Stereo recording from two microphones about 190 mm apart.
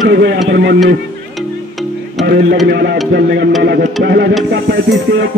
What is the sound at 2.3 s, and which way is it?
A man's voice, 60° right (ahead or behind).